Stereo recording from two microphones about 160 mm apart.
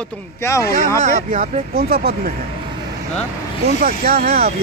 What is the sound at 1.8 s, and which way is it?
Speech, 70° right (ahead or behind).